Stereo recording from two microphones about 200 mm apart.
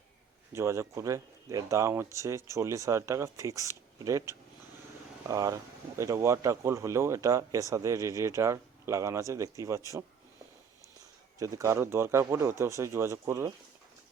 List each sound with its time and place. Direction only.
0.5 s speech: 15° right (ahead or behind)
11.3 s speech: 15° right (ahead or behind)